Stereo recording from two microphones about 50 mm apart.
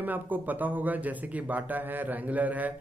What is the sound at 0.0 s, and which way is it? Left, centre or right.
A man's voice, right.